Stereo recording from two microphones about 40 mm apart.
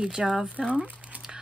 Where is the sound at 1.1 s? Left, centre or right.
Right.